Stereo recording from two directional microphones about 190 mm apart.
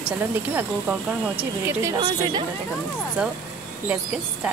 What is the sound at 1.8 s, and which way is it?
Speech, 25° right (ahead or behind).